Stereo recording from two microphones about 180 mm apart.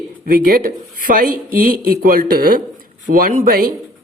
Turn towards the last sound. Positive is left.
turn(degrees=-55)  # may be behind; listen again after turning